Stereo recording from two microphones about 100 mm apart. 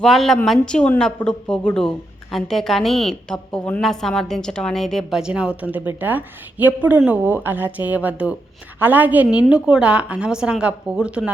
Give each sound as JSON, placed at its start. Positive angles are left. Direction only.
{"t": 0.0, "sound": "a woman's voice", "side_deg": 5}
{"t": 5.2, "sound": "a woman's voice", "side_deg": -10}